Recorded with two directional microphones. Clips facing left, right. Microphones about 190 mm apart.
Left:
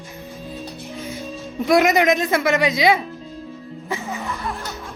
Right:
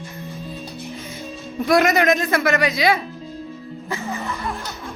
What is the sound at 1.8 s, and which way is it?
Speech, 15° left (ahead or behind).